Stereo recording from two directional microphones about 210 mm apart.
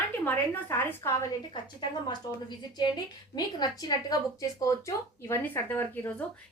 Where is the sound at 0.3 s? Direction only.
10° left (ahead or behind).